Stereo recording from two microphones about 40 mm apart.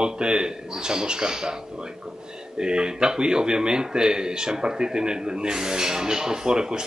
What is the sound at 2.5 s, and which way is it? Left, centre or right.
A man's voice, right.